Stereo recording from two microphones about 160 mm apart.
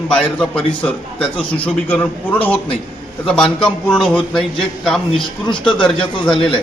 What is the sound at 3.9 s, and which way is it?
A man's voice, 5° left (ahead or behind).